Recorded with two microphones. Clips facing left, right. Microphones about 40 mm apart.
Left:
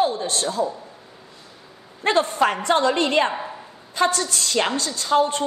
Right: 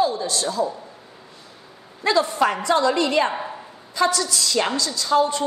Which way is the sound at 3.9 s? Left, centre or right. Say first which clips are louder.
Even; left.